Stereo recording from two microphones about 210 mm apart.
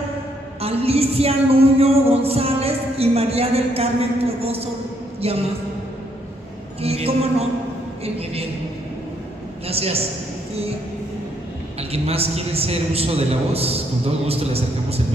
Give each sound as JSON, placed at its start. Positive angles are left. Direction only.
{"t": 0.6, "sound": "a woman's voice", "side_deg": -30}
{"t": 6.8, "sound": "a woman's voice", "side_deg": -30}
{"t": 9.7, "sound": "a woman's voice", "side_deg": -30}
{"t": 11.9, "sound": "a woman's voice", "side_deg": -30}